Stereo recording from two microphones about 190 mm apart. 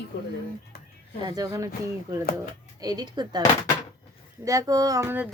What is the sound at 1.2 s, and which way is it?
Speech, 20° right (ahead or behind).